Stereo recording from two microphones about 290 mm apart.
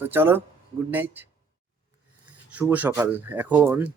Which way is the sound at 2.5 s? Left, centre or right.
Centre.